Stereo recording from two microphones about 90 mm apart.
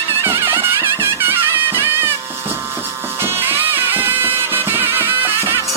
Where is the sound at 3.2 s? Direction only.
25° right (ahead or behind).